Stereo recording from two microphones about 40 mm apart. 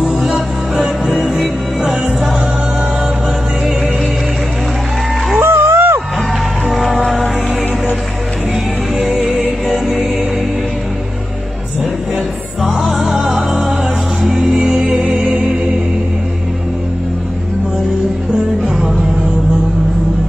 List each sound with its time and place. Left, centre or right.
0.0 s music: centre
5.4 s music: right
6.7 s music: centre
12.7 s music: centre
14.7 s music: centre